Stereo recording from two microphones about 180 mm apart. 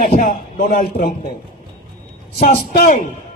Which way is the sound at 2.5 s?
50° left (ahead or behind).